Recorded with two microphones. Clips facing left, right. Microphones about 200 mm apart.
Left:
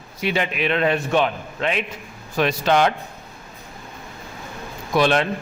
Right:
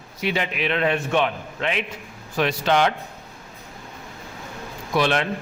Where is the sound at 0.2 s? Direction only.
55° left (ahead or behind).